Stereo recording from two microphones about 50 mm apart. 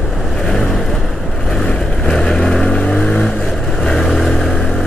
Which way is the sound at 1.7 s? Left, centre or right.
Centre.